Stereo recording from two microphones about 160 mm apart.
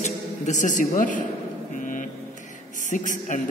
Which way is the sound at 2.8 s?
50° left (ahead or behind).